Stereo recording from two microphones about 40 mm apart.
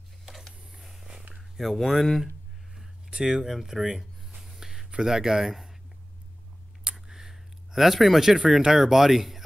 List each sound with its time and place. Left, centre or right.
0.2 s spray: centre
0.7 s a sound: centre
1.4 s speech: centre
3.1 s speech: centre
3.4 s speech: centre
4.4 s a sound: centre
5.0 s speech: centre
7.1 s a sound: centre
8.7 s speech: centre